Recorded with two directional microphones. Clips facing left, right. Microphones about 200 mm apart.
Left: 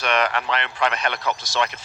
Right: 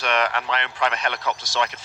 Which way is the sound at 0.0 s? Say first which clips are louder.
Left 1 dB; 60° left (ahead or behind).